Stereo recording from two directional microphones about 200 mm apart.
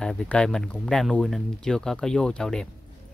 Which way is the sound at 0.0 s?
5° left (ahead or behind).